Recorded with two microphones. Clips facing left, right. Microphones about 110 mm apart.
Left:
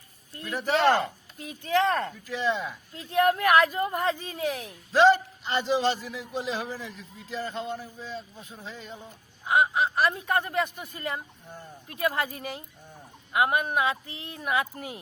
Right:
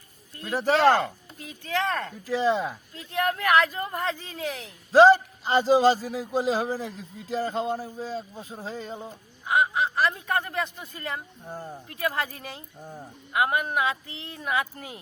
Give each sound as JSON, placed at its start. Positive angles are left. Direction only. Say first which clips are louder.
{"t": 0.4, "sound": "speech", "louder": "right 3 dB", "side_deg": -30}
{"t": 1.0, "sound": "speech", "louder": "right 1 dB", "side_deg": 25}
{"t": 2.2, "sound": "a man's voice", "louder": "right 4 dB", "side_deg": -30}
{"t": 2.9, "sound": "speech", "louder": "left 6 dB", "side_deg": 25}
{"t": 4.9, "sound": "a man's voice", "louder": "right 4 dB", "side_deg": -35}
{"t": 9.5, "sound": "speech", "louder": "even", "side_deg": 20}
{"t": 11.4, "sound": "speech", "louder": "right 7 dB", "side_deg": -45}
{"t": 11.9, "sound": "speech", "louder": "left 1 dB", "side_deg": 25}
{"t": 12.8, "sound": "speech", "louder": "right 8 dB", "side_deg": -45}
{"t": 13.3, "sound": "speech", "louder": "even", "side_deg": 25}